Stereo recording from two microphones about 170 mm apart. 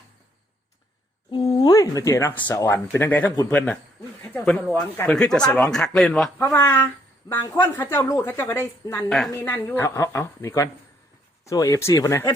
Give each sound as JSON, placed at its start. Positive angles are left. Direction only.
{"t": 1.3, "sound": "a woman's voice", "side_deg": 25}
{"t": 6.4, "sound": "a woman's voice", "side_deg": 15}